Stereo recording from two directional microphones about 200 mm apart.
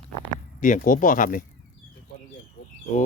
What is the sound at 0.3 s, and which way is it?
Speech, 40° left (ahead or behind).